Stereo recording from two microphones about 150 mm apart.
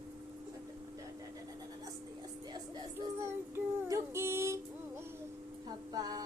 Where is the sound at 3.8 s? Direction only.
20° right (ahead or behind).